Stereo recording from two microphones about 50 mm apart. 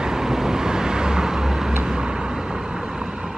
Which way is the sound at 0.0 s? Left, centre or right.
Centre.